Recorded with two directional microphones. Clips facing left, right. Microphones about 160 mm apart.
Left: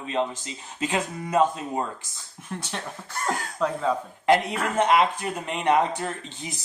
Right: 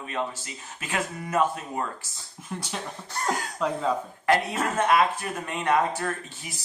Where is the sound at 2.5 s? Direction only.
5° right (ahead or behind).